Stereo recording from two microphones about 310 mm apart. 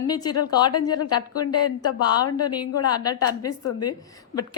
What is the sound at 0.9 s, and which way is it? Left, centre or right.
Speech, left.